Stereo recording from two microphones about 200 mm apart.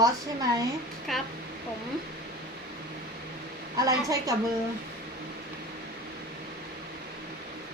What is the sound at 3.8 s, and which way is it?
Speech, 15° right (ahead or behind).